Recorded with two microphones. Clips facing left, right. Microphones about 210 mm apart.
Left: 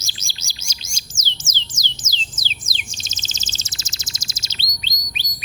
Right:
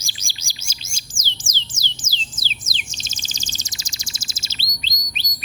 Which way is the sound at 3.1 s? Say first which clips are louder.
Right 1 dB; 10° right (ahead or behind).